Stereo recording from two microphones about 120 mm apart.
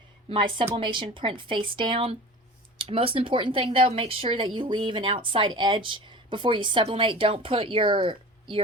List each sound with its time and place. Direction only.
0.3 s a woman's voice: 45° right (ahead or behind)